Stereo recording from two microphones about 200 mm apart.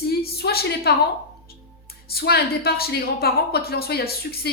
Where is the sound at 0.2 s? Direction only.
50° left (ahead or behind).